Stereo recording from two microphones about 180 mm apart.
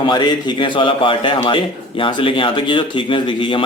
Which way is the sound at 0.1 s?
25° left (ahead or behind).